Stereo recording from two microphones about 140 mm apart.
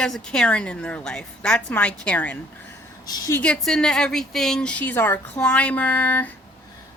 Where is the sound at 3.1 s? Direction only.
25° left (ahead or behind).